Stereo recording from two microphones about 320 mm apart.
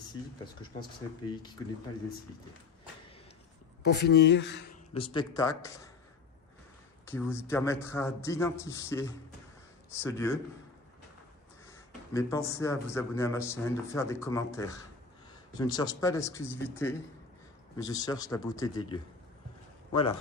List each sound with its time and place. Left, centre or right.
1.6 s a man's voice: centre
3.8 s speech: left
4.9 s a man's voice: centre
7.0 s a man's voice: centre
12.1 s a man's voice: centre